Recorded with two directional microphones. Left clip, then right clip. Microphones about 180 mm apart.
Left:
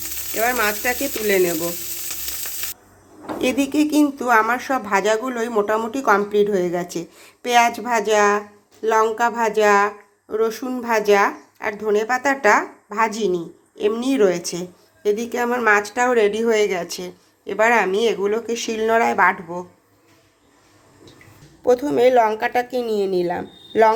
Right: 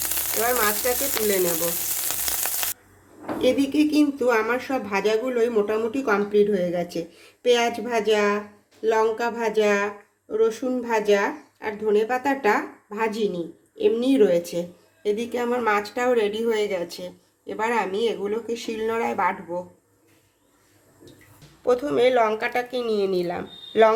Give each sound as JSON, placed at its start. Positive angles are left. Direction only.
{"t": 0.4, "sound": "frying", "side_deg": 30}
{"t": 3.2, "sound": "speech", "side_deg": 15}
{"t": 21.6, "sound": "speech", "side_deg": 10}